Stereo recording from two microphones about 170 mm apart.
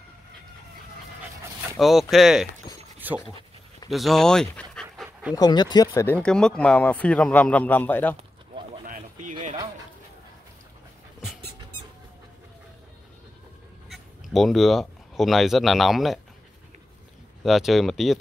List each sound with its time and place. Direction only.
1.8 s speech: centre (ahead or behind)
3.9 s speech: centre (ahead or behind)
4.9 s dog: centre (ahead or behind)
5.3 s speech: 25° left (ahead or behind)
6.0 s a man's voice: 5° left (ahead or behind)
8.8 s a sound: 50° right (ahead or behind)
13.8 s speech: centre (ahead or behind)
17.4 s speech: centre (ahead or behind)